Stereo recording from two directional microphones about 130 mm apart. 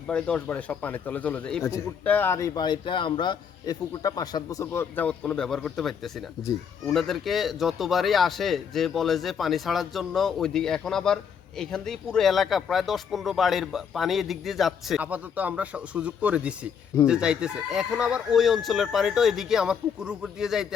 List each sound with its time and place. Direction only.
0.1 s speech: 10° left (ahead or behind)
2.6 s a man's voice: 35° left (ahead or behind); by 20.7 s 5° right (ahead or behind)